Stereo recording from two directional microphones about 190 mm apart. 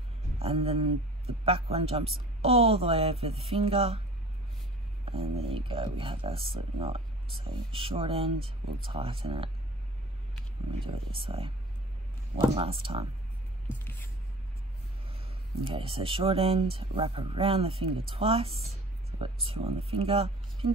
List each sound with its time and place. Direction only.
0.4 s speech: 30° right (ahead or behind)
5.0 s speech: 30° right (ahead or behind)
10.7 s speech: 30° right (ahead or behind)
15.6 s speech: 30° right (ahead or behind)